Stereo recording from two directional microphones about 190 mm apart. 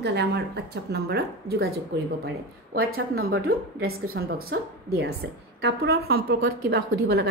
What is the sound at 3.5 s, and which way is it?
A woman's voice, 55° right (ahead or behind).